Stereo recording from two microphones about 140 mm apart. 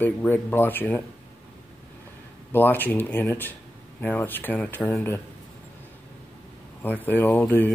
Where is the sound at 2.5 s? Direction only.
15° left (ahead or behind).